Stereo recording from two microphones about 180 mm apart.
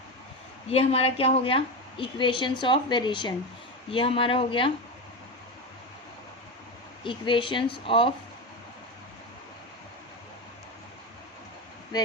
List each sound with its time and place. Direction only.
0.7 s a woman's voice: 30° left (ahead or behind)
7.0 s a woman's voice: 30° left (ahead or behind)